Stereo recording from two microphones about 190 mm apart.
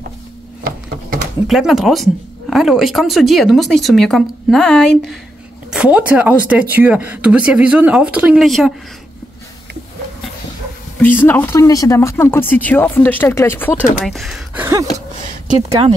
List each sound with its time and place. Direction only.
1.5 s speech: centre (ahead or behind)
11.0 s speech: 10° left (ahead or behind)
14.0 s speech: centre (ahead or behind)
14.6 s speech: 20° right (ahead or behind)